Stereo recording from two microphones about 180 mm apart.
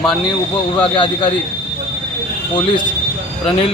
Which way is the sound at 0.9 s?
30° left (ahead or behind).